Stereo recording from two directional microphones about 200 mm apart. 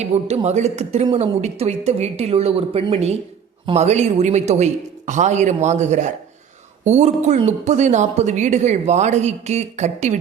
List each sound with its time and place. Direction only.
0.0 s speech: 30° right (ahead or behind)